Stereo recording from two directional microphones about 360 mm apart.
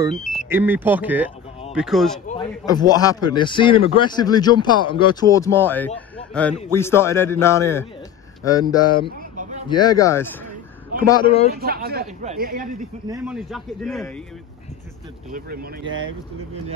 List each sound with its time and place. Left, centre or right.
0.0 s speech: centre
2.2 s a man's voice: centre
11.5 s speech: right
13.1 s speech: centre